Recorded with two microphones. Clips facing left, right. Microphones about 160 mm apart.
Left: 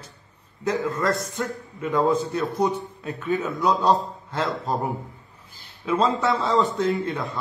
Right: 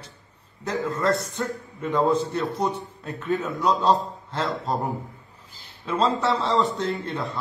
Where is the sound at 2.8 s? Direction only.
Centre (ahead or behind).